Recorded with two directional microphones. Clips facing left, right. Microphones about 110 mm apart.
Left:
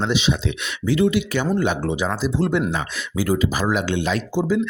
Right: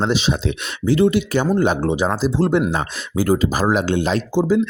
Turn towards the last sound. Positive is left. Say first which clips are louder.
# right 3 dB
turn(degrees=-35)  # may be behind; listen again after turning